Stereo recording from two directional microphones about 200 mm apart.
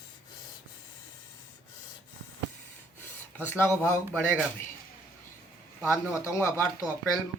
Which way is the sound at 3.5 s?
10° left (ahead or behind).